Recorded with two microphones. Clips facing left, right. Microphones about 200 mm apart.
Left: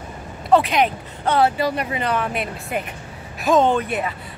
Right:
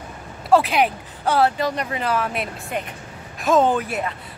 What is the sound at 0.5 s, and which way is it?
Speech, 5° right (ahead or behind).